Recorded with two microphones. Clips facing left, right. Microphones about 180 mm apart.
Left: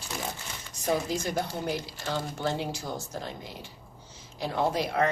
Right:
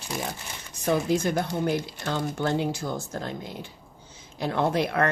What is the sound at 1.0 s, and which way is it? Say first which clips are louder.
Speech: right 5 dB; 55° right (ahead or behind).